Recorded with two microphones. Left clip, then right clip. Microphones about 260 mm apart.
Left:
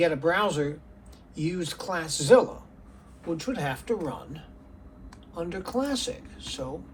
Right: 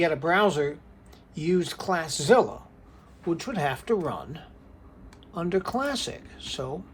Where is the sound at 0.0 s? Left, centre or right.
Right.